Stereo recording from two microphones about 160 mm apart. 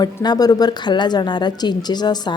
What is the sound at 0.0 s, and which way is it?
A woman's voice, 25° left (ahead or behind).